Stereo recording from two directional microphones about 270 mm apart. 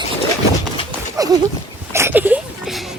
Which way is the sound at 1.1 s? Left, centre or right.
Centre.